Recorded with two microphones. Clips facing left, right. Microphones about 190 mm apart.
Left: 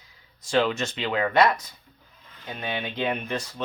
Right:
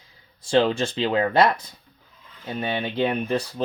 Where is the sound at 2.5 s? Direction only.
35° right (ahead or behind).